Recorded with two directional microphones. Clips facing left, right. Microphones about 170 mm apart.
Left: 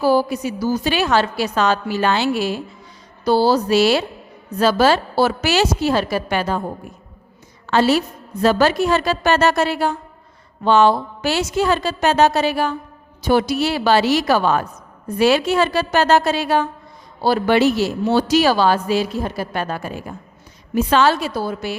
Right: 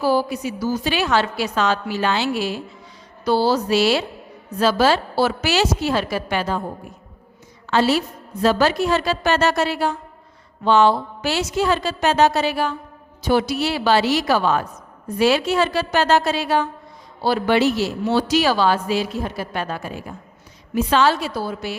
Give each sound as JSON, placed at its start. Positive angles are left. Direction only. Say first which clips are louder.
{"t": 0.0, "sound": "speech", "louder": "left 3 dB", "side_deg": 45}
{"t": 3.2, "sound": "speech", "louder": "left 3 dB", "side_deg": 35}
{"t": 7.7, "sound": "speech", "louder": "left 2 dB", "side_deg": 45}